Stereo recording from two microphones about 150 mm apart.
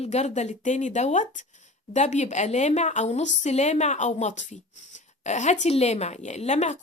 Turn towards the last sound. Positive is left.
turn(degrees=50)  # may be behind; listen again after turning